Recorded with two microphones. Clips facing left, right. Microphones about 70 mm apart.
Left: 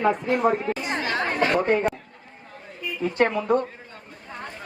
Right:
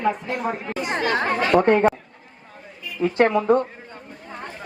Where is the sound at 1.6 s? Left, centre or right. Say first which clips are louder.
Right 8 dB; right.